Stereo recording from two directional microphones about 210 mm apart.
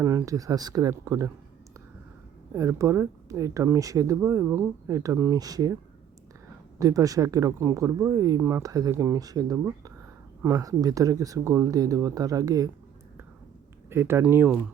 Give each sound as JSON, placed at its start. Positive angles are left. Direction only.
{"t": 0.0, "sound": "speech", "side_deg": -10}
{"t": 2.5, "sound": "speech", "side_deg": -15}
{"t": 6.7, "sound": "speech", "side_deg": -15}
{"t": 13.9, "sound": "speech", "side_deg": -10}